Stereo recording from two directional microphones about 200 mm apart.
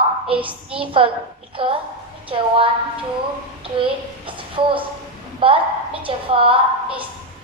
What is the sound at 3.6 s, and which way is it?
A child's voice, 25° right (ahead or behind).